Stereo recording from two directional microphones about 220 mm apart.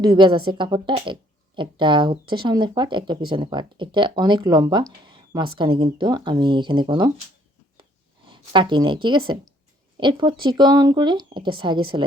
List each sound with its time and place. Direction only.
0.0 s a woman's voice: 20° right (ahead or behind)
8.3 s a woman's voice: 20° right (ahead or behind)